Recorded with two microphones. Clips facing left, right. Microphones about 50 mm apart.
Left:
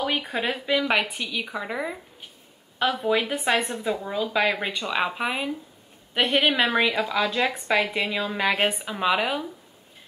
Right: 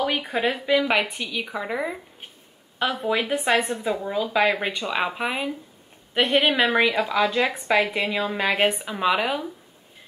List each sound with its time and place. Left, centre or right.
0.0 s speech: centre